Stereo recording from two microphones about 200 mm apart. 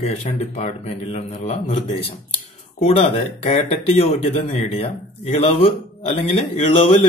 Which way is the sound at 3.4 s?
30° left (ahead or behind).